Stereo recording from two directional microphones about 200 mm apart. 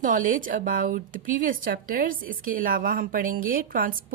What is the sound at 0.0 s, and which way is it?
Speech, 40° right (ahead or behind).